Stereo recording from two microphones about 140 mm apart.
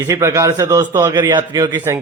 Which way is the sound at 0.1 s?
25° right (ahead or behind).